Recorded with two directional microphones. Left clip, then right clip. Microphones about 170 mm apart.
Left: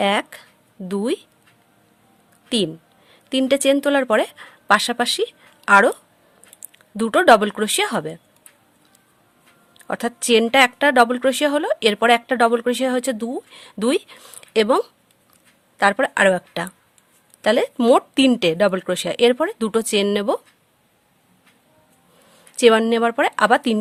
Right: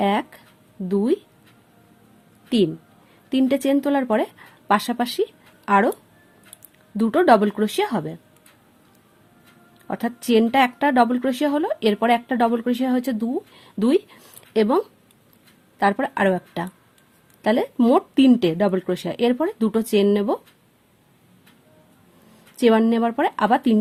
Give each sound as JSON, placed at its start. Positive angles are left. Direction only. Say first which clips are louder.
{"t": 0.0, "sound": "speech", "louder": "left 2 dB", "side_deg": 30}
{"t": 3.1, "sound": "a woman's voice", "louder": "left 2 dB", "side_deg": 25}
{"t": 9.8, "sound": "speech", "louder": "left 3 dB", "side_deg": 30}
{"t": 22.3, "sound": "speech", "louder": "left 4 dB", "side_deg": 30}